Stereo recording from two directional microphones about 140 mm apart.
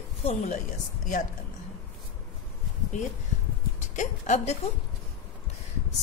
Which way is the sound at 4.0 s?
55° left (ahead or behind).